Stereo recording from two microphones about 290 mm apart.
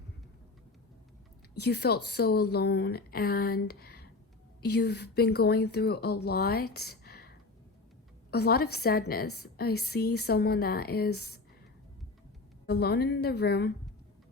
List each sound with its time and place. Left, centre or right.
1.5 s speech: left
6.7 s a sound: left
8.3 s speech: left
12.6 s speech: left